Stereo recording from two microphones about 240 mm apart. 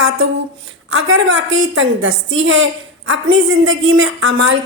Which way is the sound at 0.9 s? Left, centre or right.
Right.